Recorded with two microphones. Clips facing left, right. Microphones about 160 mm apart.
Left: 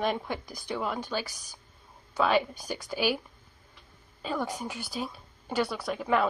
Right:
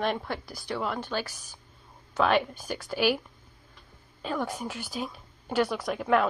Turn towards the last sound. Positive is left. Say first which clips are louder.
# right 2 dB
turn(degrees=0)  # may be behind; listen again after turning